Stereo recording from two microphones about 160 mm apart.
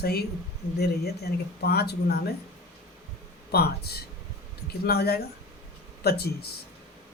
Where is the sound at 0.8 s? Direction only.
85° left.